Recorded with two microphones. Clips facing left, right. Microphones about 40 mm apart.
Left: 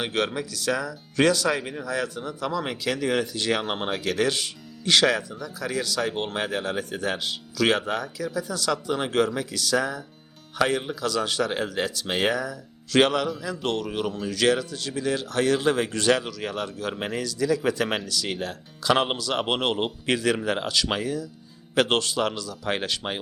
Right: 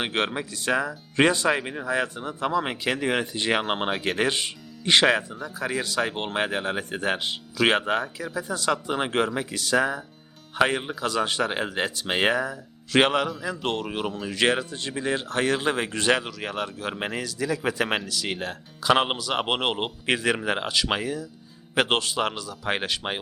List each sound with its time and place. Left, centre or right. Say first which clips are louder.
0.0 s speech: even; right